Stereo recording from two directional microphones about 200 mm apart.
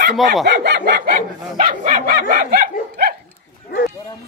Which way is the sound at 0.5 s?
55° right (ahead or behind).